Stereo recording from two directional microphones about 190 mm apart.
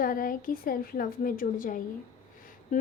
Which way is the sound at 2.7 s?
40° left (ahead or behind).